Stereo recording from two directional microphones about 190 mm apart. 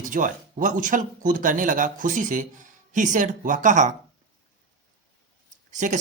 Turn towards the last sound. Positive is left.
turn(degrees=-40)  # may be behind; listen again after turning